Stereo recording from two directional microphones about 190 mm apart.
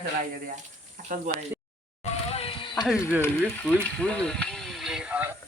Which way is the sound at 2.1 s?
30° left (ahead or behind).